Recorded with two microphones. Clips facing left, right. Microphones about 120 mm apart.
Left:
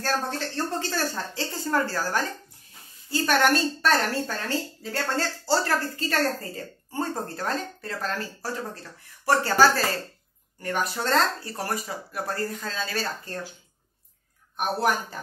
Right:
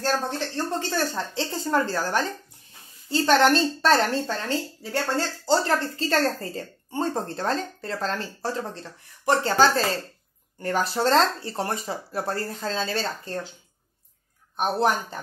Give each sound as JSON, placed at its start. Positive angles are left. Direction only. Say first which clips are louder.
{"t": 0.0, "sound": "a woman's voice", "louder": "right 2 dB", "side_deg": -15}
{"t": 14.6, "sound": "a woman's voice", "louder": "right 2 dB", "side_deg": -25}